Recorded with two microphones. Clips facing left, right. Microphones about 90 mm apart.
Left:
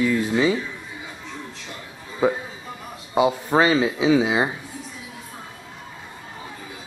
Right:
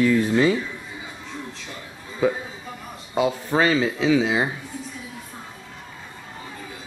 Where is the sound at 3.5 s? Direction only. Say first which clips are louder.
Left 2 dB; 25° left (ahead or behind).